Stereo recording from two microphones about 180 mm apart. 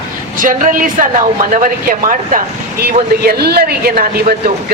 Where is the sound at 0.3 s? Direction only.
45° right (ahead or behind).